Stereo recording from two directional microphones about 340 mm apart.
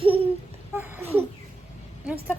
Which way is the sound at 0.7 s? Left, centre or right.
Centre.